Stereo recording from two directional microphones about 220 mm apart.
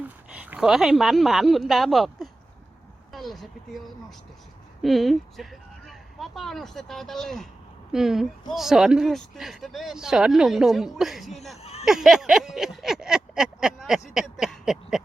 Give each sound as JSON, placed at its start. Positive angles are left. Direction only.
{"t": 0.3, "sound": "speech", "side_deg": -5}
{"t": 11.5, "sound": "speech", "side_deg": 30}
{"t": 11.9, "sound": "speech", "side_deg": 0}